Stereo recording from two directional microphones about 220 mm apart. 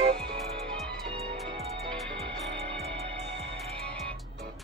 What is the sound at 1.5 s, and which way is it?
Music, 30° right (ahead or behind).